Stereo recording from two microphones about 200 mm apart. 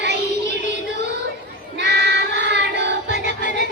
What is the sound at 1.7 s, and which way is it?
Child singing, 60° right (ahead or behind).